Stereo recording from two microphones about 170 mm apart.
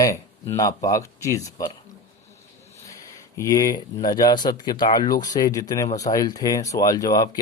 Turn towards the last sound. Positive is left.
turn(degrees=20)  # may be behind; listen again after turning